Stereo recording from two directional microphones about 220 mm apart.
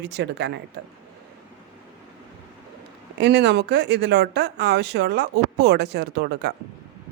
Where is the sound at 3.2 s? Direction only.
50° right (ahead or behind).